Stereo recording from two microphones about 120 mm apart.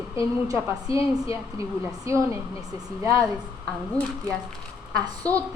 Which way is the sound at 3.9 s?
10° left (ahead or behind).